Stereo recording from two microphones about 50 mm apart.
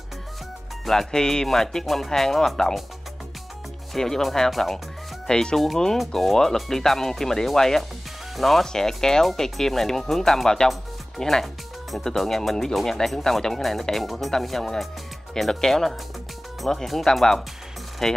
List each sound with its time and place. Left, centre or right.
0.8 s speech: centre
3.9 s speech: centre
5.2 s speech: centre
11.1 s music: centre
12.0 s speech: centre